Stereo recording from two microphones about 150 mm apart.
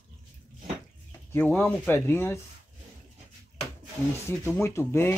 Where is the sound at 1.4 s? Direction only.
10° left (ahead or behind).